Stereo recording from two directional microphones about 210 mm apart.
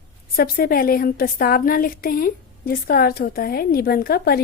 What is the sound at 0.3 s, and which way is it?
A woman's voice, 45° left (ahead or behind).